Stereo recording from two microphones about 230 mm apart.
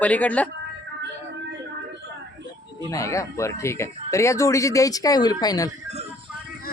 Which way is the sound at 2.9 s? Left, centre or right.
Centre.